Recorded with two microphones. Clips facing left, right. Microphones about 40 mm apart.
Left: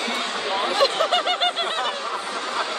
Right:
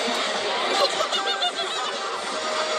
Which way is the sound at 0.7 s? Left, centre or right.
Left.